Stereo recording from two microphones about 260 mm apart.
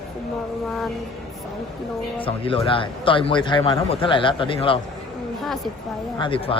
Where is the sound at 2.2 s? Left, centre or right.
Left.